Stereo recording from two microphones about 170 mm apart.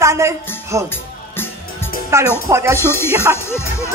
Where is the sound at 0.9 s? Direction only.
15° left (ahead or behind).